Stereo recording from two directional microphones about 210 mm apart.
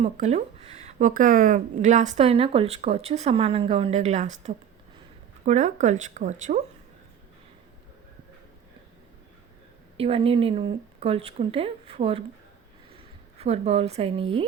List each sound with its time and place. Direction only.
0.0 s speech: 35° right (ahead or behind)
10.0 s speech: 25° right (ahead or behind)
13.4 s speech: 30° right (ahead or behind)